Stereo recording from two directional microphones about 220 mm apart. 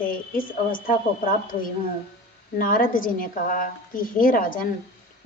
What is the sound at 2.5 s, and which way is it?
A woman's voice, 40° left (ahead or behind).